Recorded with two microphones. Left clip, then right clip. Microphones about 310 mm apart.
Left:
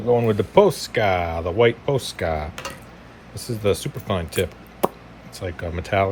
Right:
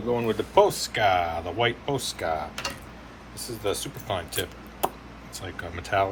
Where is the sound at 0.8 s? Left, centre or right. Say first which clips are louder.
Left 2 dB; centre.